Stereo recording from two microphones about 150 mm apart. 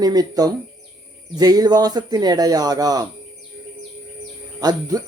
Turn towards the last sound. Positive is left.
turn(degrees=-25)  # may be behind; listen again after turning